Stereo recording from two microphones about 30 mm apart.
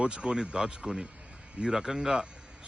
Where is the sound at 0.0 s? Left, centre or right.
Right.